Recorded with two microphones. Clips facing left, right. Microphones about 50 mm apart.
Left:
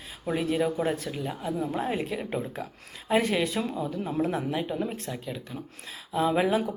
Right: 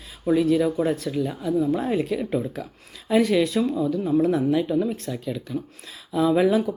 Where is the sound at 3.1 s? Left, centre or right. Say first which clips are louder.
Right 5 dB; left.